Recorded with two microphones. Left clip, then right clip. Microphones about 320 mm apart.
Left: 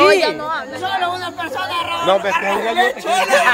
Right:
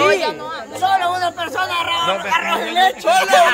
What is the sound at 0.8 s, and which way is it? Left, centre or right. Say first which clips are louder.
Music: right 4 dB; centre.